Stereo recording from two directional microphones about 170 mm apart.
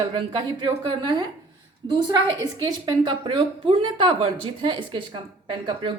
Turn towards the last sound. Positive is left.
turn(degrees=-30)  # may be behind; listen again after turning